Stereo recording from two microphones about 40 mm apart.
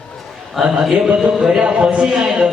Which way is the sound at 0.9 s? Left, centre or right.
Right.